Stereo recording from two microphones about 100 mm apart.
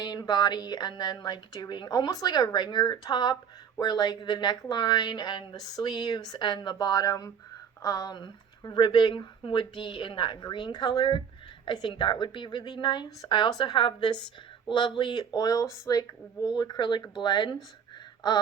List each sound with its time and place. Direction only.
0.0 s speech: 40° left (ahead or behind)